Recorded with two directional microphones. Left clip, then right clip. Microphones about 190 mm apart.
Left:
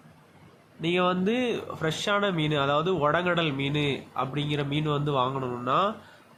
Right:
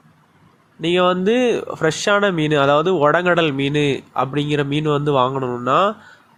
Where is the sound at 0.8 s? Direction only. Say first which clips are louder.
Right 9 dB; 30° right (ahead or behind).